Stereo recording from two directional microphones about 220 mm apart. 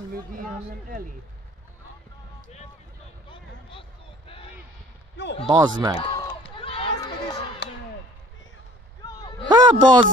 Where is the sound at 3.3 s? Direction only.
25° left (ahead or behind).